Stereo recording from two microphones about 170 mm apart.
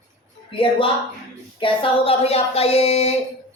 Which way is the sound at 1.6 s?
30° left (ahead or behind).